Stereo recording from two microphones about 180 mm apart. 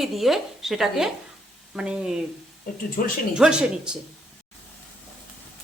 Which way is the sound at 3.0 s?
50° left (ahead or behind).